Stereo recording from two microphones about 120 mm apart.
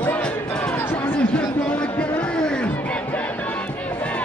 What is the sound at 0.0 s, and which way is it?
Music, 10° left (ahead or behind).